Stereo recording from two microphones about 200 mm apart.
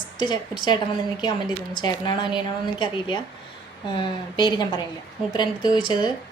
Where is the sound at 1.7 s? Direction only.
25° left (ahead or behind).